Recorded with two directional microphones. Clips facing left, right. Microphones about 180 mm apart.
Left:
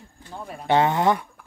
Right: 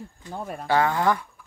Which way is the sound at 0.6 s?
20° left (ahead or behind).